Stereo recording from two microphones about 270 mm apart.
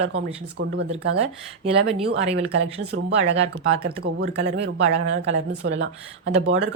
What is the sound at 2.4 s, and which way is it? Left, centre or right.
Speech, right.